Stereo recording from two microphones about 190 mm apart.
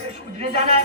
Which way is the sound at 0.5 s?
30° right (ahead or behind).